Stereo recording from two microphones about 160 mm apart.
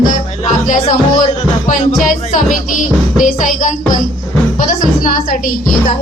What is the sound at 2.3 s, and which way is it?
Music, 50° left (ahead or behind).